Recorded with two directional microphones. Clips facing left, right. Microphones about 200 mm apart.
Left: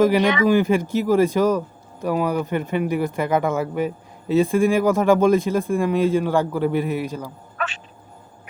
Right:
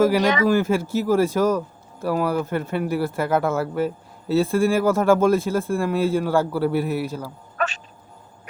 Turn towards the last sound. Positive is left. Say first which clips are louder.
# right 3 dB
turn(degrees=-40)  # may be behind; listen again after turning